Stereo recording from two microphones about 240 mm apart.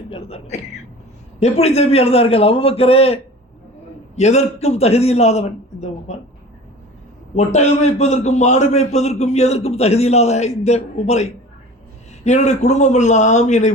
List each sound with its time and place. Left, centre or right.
0.1 s a man's voice: left
7.3 s a man's voice: left